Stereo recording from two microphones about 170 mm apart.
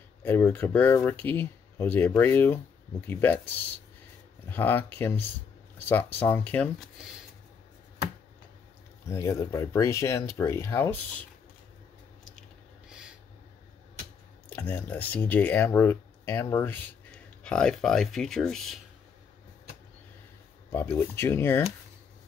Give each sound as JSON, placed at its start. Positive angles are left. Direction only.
{"t": 0.2, "sound": "speech", "side_deg": 10}
{"t": 9.0, "sound": "speech", "side_deg": 15}
{"t": 14.5, "sound": "speech", "side_deg": 10}
{"t": 20.7, "sound": "speech", "side_deg": 15}